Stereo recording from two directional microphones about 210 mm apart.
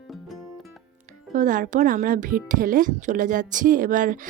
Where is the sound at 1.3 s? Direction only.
40° right (ahead or behind).